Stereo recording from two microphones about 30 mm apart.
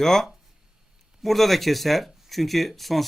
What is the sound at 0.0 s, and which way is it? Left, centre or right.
A man's voice, centre.